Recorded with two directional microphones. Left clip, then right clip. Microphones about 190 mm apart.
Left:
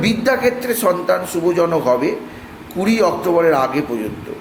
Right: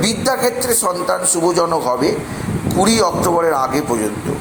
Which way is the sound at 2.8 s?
15° left (ahead or behind).